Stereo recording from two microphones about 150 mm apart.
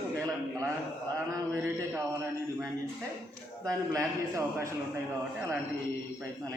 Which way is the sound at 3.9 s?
20° right (ahead or behind).